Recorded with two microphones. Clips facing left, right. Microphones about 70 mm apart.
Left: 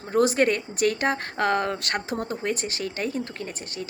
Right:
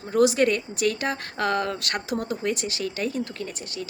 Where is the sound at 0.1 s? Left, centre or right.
Left.